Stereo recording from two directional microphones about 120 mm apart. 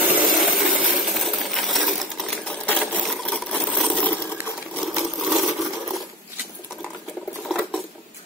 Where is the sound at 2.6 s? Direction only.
10° left (ahead or behind).